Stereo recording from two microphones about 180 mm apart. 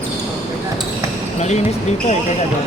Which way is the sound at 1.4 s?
40° left (ahead or behind).